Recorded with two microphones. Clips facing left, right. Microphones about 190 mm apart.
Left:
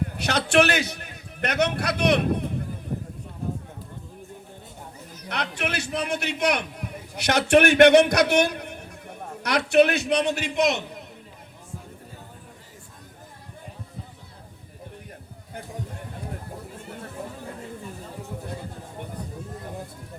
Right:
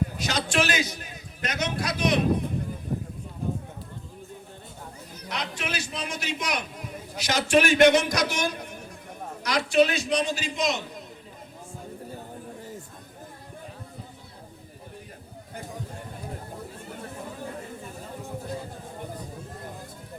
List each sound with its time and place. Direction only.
0.2 s a man's voice: 60° left (ahead or behind)
5.3 s a man's voice: 60° left (ahead or behind)